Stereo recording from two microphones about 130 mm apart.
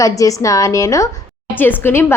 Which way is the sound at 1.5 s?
15° left (ahead or behind).